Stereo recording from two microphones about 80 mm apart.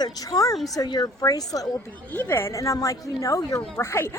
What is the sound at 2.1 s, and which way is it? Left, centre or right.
A woman's voice, left.